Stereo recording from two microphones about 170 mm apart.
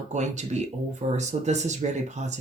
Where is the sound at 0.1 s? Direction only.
45° right (ahead or behind).